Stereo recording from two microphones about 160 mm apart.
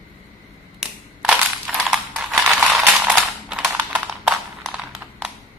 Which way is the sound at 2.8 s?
5° right (ahead or behind).